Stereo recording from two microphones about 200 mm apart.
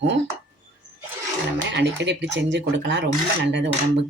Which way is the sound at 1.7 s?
60° right (ahead or behind).